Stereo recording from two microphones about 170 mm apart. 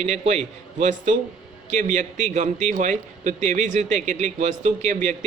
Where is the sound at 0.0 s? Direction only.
45° right (ahead or behind).